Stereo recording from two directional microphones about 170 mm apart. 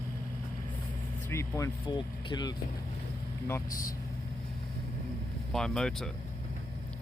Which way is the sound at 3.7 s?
55° left (ahead or behind).